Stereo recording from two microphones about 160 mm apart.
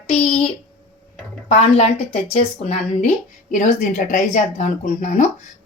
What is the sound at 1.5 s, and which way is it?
A woman's voice, 40° left (ahead or behind).